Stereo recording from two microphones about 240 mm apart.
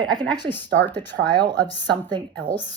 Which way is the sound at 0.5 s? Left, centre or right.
Centre.